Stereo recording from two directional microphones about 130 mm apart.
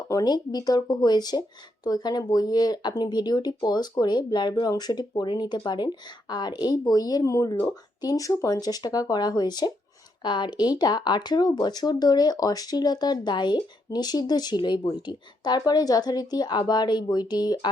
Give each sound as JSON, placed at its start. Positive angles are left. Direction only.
{"t": 0.1, "sound": "speech", "side_deg": 30}